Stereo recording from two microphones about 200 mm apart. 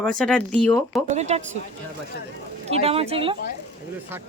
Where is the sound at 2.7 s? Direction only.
30° right (ahead or behind).